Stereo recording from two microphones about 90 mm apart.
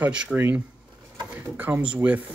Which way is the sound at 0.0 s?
10° right (ahead or behind).